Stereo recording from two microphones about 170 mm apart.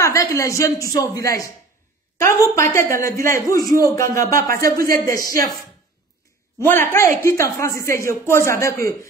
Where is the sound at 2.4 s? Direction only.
15° left (ahead or behind).